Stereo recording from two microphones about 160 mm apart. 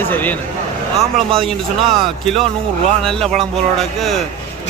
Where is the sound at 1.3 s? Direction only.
35° right (ahead or behind).